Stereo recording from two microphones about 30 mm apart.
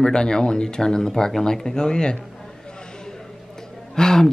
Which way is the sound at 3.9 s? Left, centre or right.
Centre.